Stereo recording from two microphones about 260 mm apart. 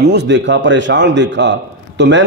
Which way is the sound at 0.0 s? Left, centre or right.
Right.